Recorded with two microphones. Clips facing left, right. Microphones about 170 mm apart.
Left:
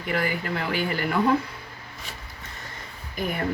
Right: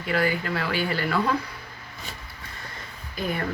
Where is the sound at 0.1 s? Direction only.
20° left (ahead or behind).